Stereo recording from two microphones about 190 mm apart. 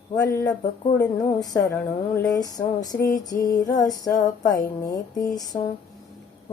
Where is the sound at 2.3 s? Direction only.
20° left (ahead or behind).